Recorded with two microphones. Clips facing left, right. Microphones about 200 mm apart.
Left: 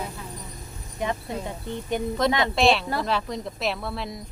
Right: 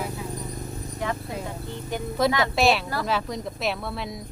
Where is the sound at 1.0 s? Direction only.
20° left (ahead or behind).